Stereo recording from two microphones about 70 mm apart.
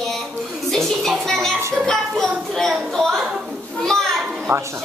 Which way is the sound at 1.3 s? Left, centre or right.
Centre.